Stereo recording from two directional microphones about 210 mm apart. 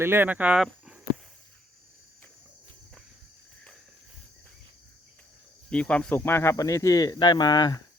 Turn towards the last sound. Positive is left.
turn(degrees=20)  # may be behind; listen again after turning